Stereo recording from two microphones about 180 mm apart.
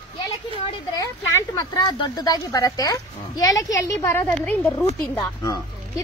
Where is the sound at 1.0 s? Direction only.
20° left (ahead or behind).